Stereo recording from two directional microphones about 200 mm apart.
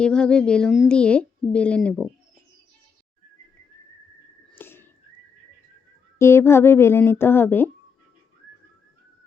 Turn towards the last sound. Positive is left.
turn(degrees=10)  # may be behind; listen again after turning